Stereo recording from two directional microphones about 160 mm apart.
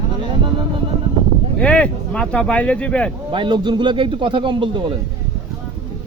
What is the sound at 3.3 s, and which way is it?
Speech, 30° right (ahead or behind).